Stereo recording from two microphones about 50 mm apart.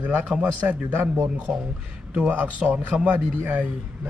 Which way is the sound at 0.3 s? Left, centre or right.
Centre.